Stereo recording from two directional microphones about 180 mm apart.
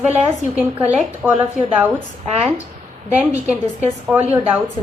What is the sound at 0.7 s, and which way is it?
Speech, 5° right (ahead or behind).